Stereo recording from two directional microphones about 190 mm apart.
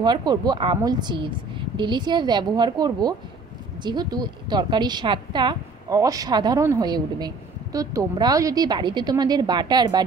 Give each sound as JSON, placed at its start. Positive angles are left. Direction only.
{"t": 0.0, "sound": "a woman's voice", "side_deg": -20}